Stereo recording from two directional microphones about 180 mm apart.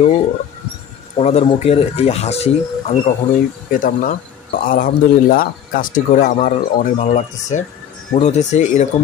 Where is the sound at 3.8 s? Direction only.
50° left (ahead or behind).